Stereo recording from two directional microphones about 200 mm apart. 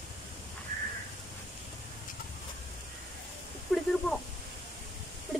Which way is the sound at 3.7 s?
Centre (ahead or behind).